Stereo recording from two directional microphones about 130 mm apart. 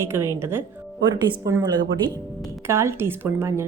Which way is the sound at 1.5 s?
30° right (ahead or behind).